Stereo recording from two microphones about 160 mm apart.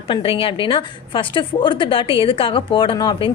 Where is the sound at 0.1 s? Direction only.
35° left (ahead or behind).